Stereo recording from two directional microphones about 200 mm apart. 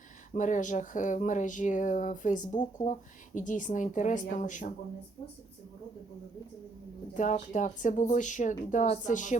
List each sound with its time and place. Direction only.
0.3 s a woman's voice: 40° left (ahead or behind)
7.1 s a woman's voice: 40° left (ahead or behind)